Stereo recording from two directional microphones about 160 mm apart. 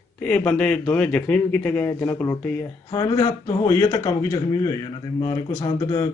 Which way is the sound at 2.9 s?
25° left (ahead or behind).